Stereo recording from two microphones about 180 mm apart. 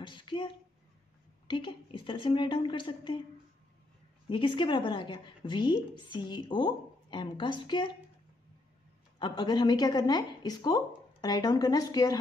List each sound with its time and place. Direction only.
0.0 s speech: 25° left (ahead or behind)
1.5 s speech: 30° left (ahead or behind)
4.3 s speech: 30° left (ahead or behind)
9.2 s speech: 25° left (ahead or behind)